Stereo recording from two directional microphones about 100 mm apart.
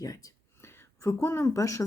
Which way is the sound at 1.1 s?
25° left (ahead or behind).